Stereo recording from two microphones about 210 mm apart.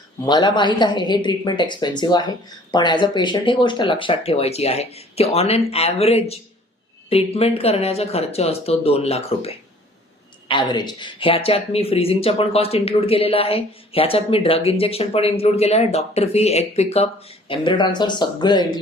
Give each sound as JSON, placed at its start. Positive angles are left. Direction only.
{"t": 0.3, "sound": "speech", "side_deg": 20}